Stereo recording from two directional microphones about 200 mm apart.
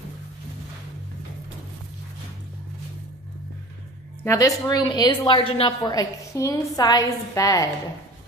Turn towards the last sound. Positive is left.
turn(degrees=15)  # may be behind; listen again after turning